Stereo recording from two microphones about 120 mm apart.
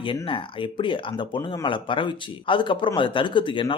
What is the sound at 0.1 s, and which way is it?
Speech, 45° left (ahead or behind).